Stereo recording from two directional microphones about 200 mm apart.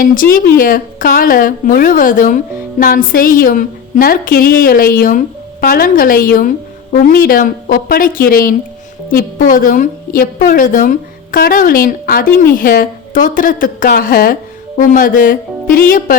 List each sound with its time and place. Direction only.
0.0 s a woman's voice: 45° left (ahead or behind)